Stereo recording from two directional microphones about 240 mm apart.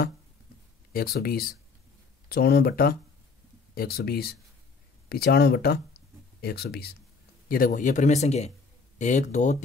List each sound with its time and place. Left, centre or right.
0.9 s a man's voice: left